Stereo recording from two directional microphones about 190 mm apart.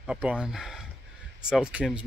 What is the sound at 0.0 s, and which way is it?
Speech, 5° right (ahead or behind).